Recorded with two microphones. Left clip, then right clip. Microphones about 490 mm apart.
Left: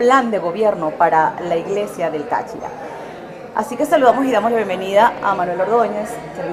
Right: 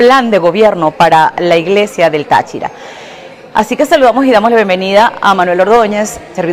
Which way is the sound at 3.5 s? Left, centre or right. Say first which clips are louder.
Right 8 dB; right.